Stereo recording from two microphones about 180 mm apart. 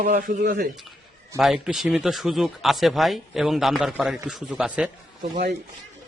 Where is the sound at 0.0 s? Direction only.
50° right (ahead or behind).